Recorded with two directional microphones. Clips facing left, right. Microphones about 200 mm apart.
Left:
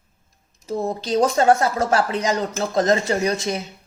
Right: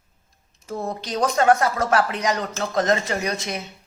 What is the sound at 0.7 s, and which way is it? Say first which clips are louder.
Speech: left 5 dB; 25° left (ahead or behind).